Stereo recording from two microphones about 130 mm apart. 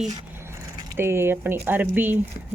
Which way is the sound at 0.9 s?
20° right (ahead or behind).